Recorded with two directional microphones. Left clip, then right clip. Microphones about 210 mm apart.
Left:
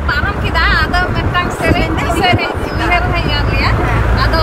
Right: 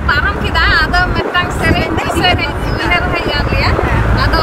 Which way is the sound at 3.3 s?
15° right (ahead or behind).